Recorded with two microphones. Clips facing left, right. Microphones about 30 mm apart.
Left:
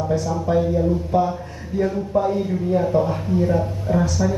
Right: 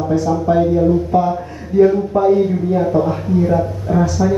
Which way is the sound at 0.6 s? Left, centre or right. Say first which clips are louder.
Right 4 dB; right.